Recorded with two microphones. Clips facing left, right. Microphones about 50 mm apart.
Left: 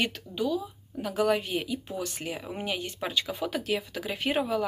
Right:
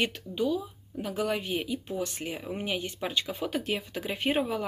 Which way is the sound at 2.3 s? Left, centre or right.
Centre.